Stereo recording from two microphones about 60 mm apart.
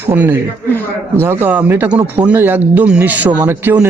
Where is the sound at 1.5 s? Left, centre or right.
Right.